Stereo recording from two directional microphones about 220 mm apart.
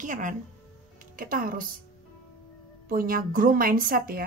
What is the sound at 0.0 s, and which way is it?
Speech, 35° right (ahead or behind).